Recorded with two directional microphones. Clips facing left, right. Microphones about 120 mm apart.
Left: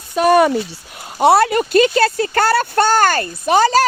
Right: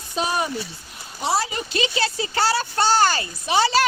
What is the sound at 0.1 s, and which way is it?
A child's voice, 65° left (ahead or behind).